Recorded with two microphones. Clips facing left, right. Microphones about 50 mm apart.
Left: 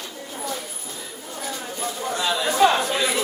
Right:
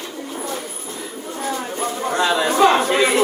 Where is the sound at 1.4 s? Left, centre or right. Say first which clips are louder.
Right 6 dB; right.